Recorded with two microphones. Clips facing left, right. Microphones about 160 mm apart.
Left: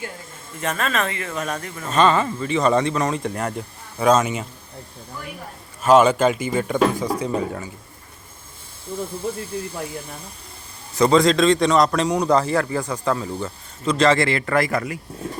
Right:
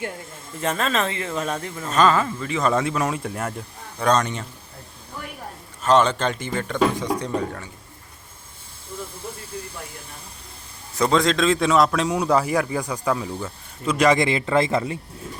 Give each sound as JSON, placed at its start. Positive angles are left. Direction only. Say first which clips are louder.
{"t": 0.6, "sound": "speech", "louder": "right 1 dB", "side_deg": -30}
{"t": 1.5, "sound": "speech", "louder": "right 1 dB", "side_deg": 0}
{"t": 5.8, "sound": "speech", "louder": "left 4 dB", "side_deg": 10}
{"t": 10.9, "sound": "a man's voice", "louder": "left 4 dB", "side_deg": 0}